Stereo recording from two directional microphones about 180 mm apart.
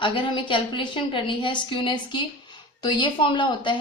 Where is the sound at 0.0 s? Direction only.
25° left (ahead or behind).